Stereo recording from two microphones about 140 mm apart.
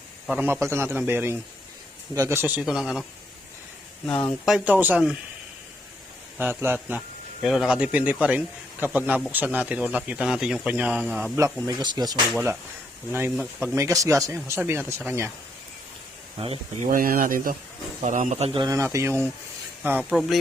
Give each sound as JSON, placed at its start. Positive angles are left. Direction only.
{"t": 0.3, "sound": "a man's voice", "side_deg": -15}
{"t": 2.6, "sound": "speech", "side_deg": -5}
{"t": 4.4, "sound": "a man's voice", "side_deg": -5}
{"t": 6.4, "sound": "a man's voice", "side_deg": -15}
{"t": 11.6, "sound": "speech", "side_deg": -30}
{"t": 13.1, "sound": "a man's voice", "side_deg": -15}
{"t": 16.4, "sound": "speech", "side_deg": -40}
{"t": 16.9, "sound": "speech", "side_deg": -90}
{"t": 18.0, "sound": "a man's voice", "side_deg": -60}
{"t": 18.5, "sound": "a man's voice", "side_deg": -30}
{"t": 20.1, "sound": "speech", "side_deg": 0}